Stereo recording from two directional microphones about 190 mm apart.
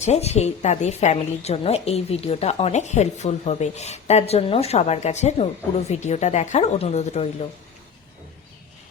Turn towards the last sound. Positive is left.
turn(degrees=35)  # may be behind; listen again after turning